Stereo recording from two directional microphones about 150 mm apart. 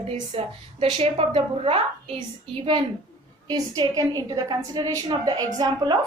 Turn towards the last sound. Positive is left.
turn(degrees=-30)  # may be behind; listen again after turning